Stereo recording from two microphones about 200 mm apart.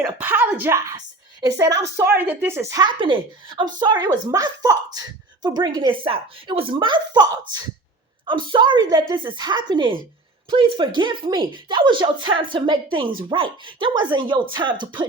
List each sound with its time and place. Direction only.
0.0 s a woman's voice: 10° right (ahead or behind)